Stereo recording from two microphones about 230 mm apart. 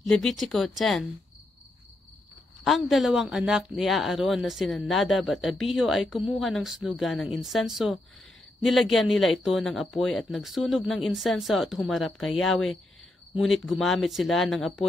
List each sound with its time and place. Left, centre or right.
0.0 s speech: centre
2.6 s speech: centre